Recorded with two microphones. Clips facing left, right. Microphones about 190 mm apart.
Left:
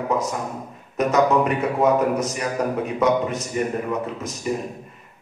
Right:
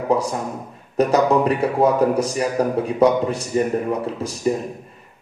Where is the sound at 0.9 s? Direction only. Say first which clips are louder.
Right 2 dB; 35° right (ahead or behind).